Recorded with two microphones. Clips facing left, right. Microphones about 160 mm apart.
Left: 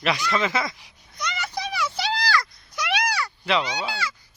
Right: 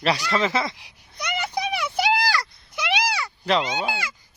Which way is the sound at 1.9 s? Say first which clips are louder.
Right 5 dB; 55° right (ahead or behind).